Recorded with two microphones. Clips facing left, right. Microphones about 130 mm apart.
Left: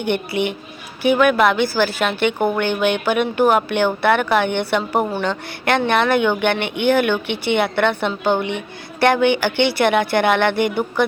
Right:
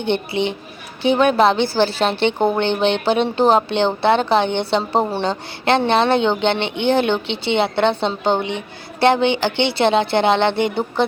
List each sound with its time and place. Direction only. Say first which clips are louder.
0.0 s a woman's voice: even; 25° right (ahead or behind)